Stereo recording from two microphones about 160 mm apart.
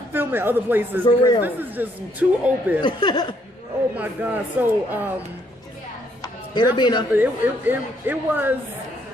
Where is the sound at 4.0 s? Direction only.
10° right (ahead or behind).